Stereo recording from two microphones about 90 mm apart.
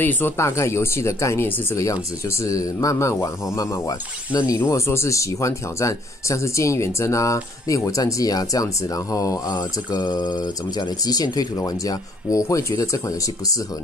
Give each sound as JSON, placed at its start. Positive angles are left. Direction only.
{"t": 0.0, "sound": "speech", "side_deg": 20}
{"t": 0.4, "sound": "speech", "side_deg": 30}
{"t": 4.6, "sound": "speech", "side_deg": 30}